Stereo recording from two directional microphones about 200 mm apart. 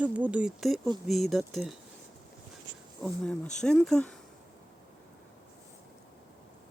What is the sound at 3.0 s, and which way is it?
Speech, 5° left (ahead or behind).